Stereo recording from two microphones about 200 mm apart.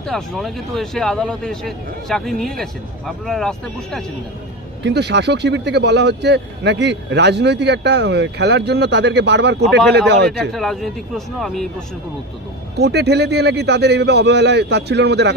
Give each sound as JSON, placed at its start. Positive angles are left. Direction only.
{"t": 0.0, "sound": "a man's voice", "side_deg": 0}
{"t": 4.8, "sound": "a man's voice", "side_deg": -60}
{"t": 10.5, "sound": "a man's voice", "side_deg": 0}
{"t": 12.7, "sound": "a man's voice", "side_deg": -55}